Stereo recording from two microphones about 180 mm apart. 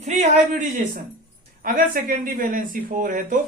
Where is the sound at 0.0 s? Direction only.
40° right (ahead or behind).